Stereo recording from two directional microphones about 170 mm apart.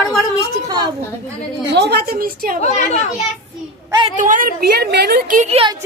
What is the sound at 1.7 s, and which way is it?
Speech, 75° right (ahead or behind).